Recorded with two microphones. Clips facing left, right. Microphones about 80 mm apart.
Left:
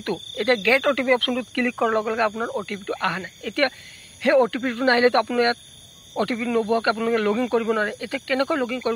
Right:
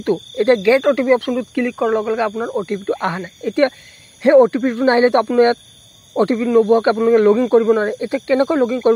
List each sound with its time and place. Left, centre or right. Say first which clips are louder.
0.0 s speech: right 8 dB; centre
2.5 s speech: right 8 dB; centre